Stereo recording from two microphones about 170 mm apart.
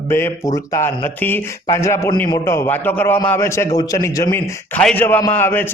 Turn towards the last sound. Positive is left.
turn(degrees=10)  # may be behind; listen again after turning